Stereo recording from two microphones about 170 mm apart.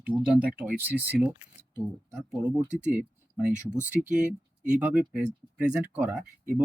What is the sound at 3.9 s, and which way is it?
Speech, 10° right (ahead or behind).